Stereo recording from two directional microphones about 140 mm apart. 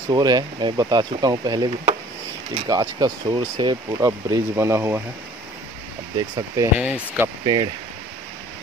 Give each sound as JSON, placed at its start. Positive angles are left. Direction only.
{"t": 0.1, "sound": "speech", "side_deg": -30}
{"t": 6.1, "sound": "speech", "side_deg": -25}
{"t": 6.8, "sound": "speech", "side_deg": -5}
{"t": 7.4, "sound": "speech", "side_deg": -30}